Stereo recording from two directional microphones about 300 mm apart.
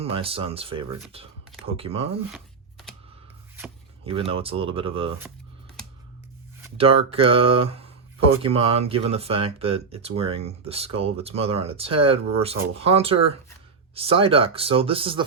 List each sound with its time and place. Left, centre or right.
0.0 s speech: centre
2.3 s a sound: centre
4.0 s speech: centre
6.7 s speech: centre